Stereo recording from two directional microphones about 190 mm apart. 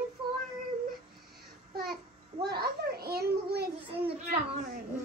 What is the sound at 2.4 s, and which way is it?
A child's voice, 55° right (ahead or behind).